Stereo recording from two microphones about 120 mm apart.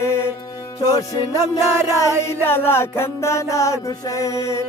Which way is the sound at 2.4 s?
20° left (ahead or behind).